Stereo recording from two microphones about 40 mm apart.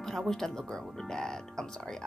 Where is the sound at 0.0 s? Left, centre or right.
Centre.